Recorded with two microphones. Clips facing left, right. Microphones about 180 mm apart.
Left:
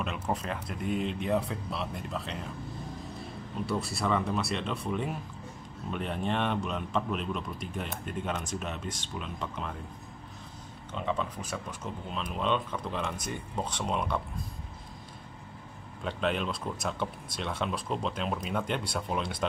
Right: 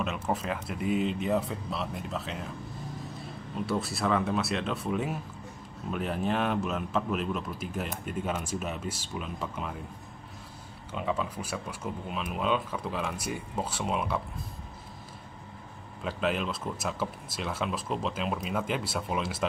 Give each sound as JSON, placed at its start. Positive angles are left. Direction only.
{"t": 0.0, "sound": "speech", "side_deg": -5}
{"t": 10.9, "sound": "speech", "side_deg": -10}
{"t": 16.0, "sound": "speech", "side_deg": -5}